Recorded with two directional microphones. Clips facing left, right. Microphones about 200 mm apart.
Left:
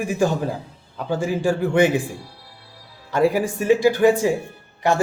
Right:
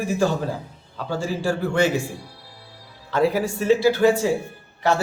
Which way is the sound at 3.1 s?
10° left (ahead or behind).